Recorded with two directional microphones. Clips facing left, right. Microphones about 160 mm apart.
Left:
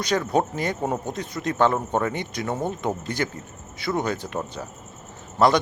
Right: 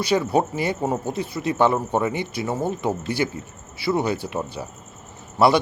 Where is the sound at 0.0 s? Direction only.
10° right (ahead or behind).